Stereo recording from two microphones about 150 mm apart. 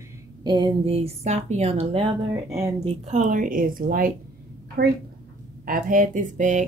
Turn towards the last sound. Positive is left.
turn(degrees=-55)  # may be behind; listen again after turning